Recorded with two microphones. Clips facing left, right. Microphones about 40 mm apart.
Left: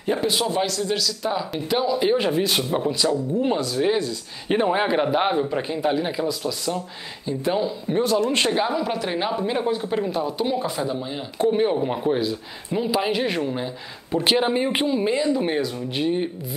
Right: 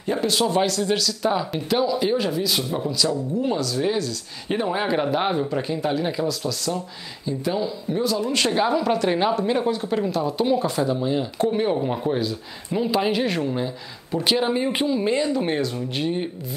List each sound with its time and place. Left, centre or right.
0.0 s speech: centre
0.6 s speech: centre
1.8 s speech: centre
8.5 s speech: centre
14.1 s speech: left
14.5 s speech: centre
15.6 s speech: centre